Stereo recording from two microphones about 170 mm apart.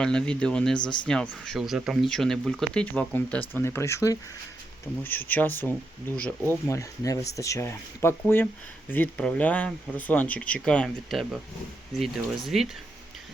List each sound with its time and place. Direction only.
0.0 s speech: 5° left (ahead or behind)